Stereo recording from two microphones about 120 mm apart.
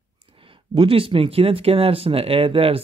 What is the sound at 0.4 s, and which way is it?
Speech, 50° right (ahead or behind).